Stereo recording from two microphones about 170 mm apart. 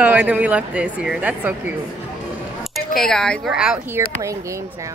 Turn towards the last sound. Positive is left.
turn(degrees=-20)  # may be behind; listen again after turning